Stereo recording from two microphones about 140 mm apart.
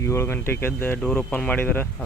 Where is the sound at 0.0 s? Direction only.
20° left (ahead or behind).